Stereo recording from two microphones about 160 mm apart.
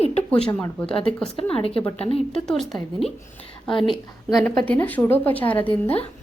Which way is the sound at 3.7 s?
30° left (ahead or behind).